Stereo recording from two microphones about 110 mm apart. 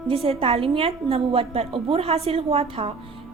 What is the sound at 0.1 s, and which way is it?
A woman's voice, 55° right (ahead or behind).